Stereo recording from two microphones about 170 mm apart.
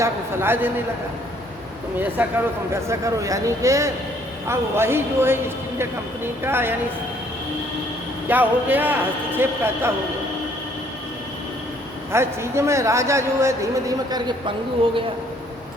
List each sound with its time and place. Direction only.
0.0 s a man's voice: 15° right (ahead or behind)
2.2 s a man's voice: 10° right (ahead or behind)
6.4 s a man's voice: 15° right (ahead or behind)
8.3 s a man's voice: 10° right (ahead or behind)
12.1 s a man's voice: 15° right (ahead or behind)